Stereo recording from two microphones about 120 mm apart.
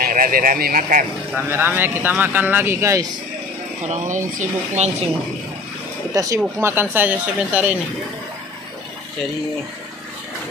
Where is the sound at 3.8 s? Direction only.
75° right (ahead or behind).